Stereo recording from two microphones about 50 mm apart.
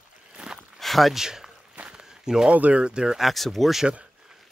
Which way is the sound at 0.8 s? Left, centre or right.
Centre.